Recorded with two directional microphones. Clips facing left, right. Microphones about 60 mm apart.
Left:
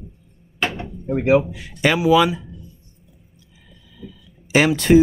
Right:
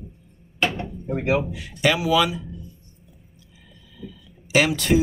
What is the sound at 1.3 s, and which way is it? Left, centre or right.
Speech, left.